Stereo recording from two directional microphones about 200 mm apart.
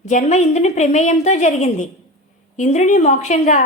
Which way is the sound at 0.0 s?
40° left (ahead or behind).